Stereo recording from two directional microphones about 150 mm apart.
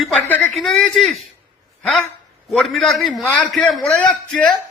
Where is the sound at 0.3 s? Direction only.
10° left (ahead or behind).